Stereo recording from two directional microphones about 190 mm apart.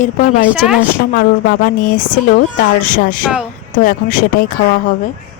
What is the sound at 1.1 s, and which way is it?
Speech, 50° left (ahead or behind).